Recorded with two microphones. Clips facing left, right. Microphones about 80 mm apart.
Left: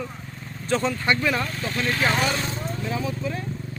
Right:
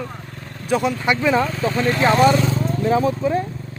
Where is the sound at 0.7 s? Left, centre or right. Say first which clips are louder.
Right 4 dB; centre.